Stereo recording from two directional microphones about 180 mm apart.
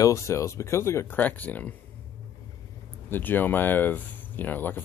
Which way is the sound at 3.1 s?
10° left (ahead or behind).